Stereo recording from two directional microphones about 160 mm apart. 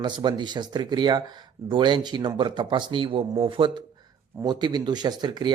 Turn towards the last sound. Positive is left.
turn(degrees=-25)  # may be behind; listen again after turning